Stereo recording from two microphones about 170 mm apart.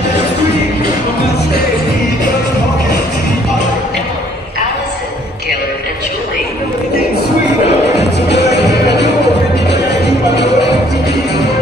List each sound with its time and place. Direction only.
8.3 s music: 80° left